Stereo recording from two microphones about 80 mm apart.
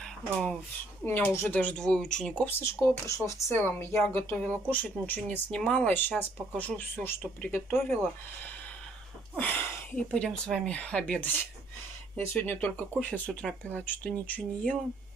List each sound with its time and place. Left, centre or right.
1.0 s a woman's voice: left
1.6 s speech: centre
2.4 s speech: left
3.5 s a woman's voice: left
9.4 s speech: left
10.1 s a woman's voice: centre
13.3 s speech: centre
13.7 s a woman's voice: centre